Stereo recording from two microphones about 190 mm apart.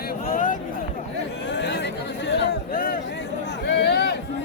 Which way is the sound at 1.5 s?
65° left (ahead or behind).